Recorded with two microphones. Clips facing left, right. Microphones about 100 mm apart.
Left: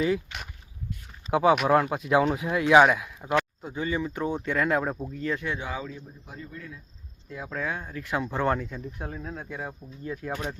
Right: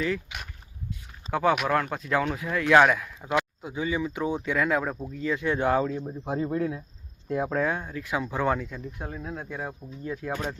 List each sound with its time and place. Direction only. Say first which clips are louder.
0.3 s a sound: even; 15° right (ahead or behind)
1.3 s speech: left 3 dB; 15° left (ahead or behind)
2.6 s speech: left 1 dB; 5° left (ahead or behind)
3.3 s speech: left 1 dB; 10° right (ahead or behind)
5.2 s speech: right 2 dB; 10° right (ahead or behind)
5.5 s speech: right 10 dB; 55° right (ahead or behind)
6.2 s speech: right 16 dB; 85° right
7.3 s speech: right 11 dB; 50° right (ahead or behind)
7.9 s speech: right 2 dB; 15° right (ahead or behind)
8.1 s speech: even; 5° right (ahead or behind)
8.5 s speech: even; 10° left (ahead or behind)
9.0 s speech: right 2 dB; 5° right (ahead or behind)